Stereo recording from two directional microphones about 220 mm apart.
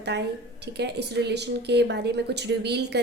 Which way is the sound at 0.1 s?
50° right (ahead or behind).